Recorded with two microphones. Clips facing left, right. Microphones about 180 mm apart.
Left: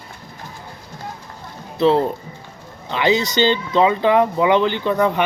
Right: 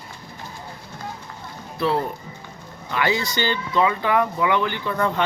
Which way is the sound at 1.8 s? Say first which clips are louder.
Left 7 dB; 25° left (ahead or behind).